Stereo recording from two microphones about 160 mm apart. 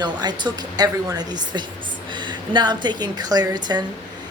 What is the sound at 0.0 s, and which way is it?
A woman's voice, 25° right (ahead or behind).